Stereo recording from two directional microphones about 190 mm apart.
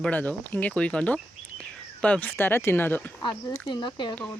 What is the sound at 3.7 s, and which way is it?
Speech, 25° left (ahead or behind).